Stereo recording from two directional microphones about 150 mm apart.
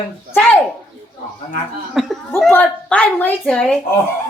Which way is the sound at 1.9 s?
Centre (ahead or behind).